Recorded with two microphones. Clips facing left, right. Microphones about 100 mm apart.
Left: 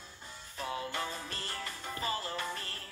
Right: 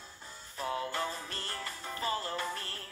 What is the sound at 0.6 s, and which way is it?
Music, centre (ahead or behind).